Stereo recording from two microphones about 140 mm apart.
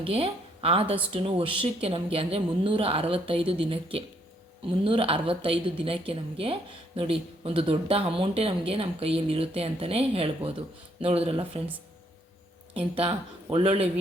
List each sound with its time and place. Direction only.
0.0 s a woman's voice: 40° right (ahead or behind)
12.9 s a woman's voice: 40° right (ahead or behind)